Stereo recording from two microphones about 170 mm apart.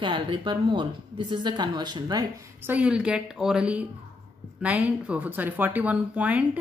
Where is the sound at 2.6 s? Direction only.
10° right (ahead or behind).